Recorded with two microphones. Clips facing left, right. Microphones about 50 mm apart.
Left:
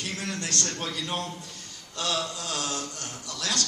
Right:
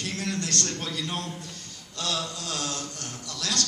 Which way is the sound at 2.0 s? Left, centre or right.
Left.